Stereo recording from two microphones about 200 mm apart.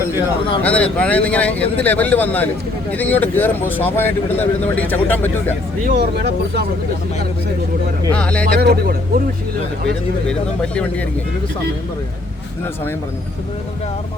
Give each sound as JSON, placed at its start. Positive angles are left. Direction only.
{"t": 0.0, "sound": "a man's voice", "side_deg": -10}
{"t": 0.6, "sound": "speech", "side_deg": 5}
{"t": 6.0, "sound": "speech", "side_deg": -55}
{"t": 8.1, "sound": "speech", "side_deg": 5}
{"t": 8.6, "sound": "speech", "side_deg": -50}
{"t": 10.2, "sound": "speech", "side_deg": 5}